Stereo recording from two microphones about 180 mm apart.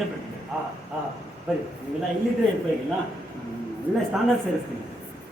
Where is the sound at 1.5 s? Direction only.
5° right (ahead or behind).